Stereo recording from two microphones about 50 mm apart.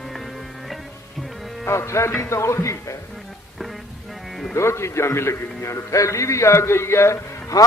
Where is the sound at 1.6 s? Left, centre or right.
Left.